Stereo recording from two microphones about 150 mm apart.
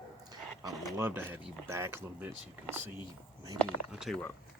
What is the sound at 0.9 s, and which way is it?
Speech, 15° right (ahead or behind).